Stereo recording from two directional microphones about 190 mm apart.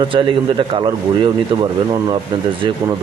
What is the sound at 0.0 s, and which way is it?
A man's voice, 25° right (ahead or behind).